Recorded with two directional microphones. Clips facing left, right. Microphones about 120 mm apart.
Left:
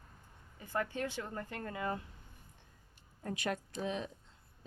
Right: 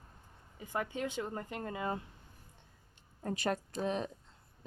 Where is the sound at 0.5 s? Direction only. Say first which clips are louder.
Even; 15° right (ahead or behind).